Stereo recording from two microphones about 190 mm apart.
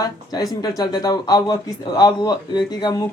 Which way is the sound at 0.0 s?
20° left (ahead or behind).